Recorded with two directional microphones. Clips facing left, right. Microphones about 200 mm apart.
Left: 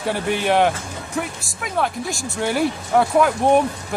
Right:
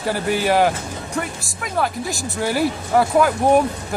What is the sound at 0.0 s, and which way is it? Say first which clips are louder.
Speech: right 1 dB; centre (ahead or behind).